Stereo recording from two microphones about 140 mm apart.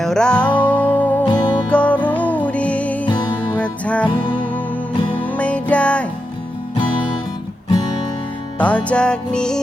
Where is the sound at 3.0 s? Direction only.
30° left (ahead or behind).